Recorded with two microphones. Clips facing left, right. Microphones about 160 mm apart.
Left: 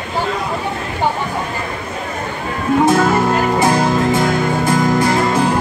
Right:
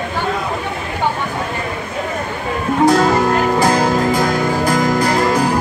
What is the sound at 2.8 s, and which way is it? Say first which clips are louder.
Music: right 2 dB; 20° left (ahead or behind).